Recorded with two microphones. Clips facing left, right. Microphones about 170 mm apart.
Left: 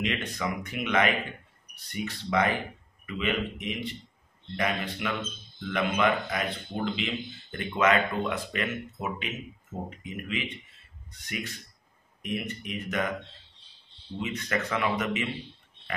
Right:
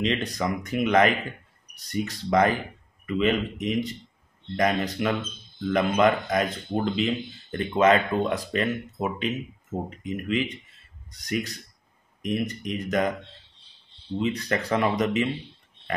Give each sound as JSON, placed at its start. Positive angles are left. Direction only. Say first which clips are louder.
{"t": 0.0, "sound": "speech", "louder": "right 5 dB", "side_deg": -35}
{"t": 14.2, "sound": "speech", "louder": "right 4 dB", "side_deg": -35}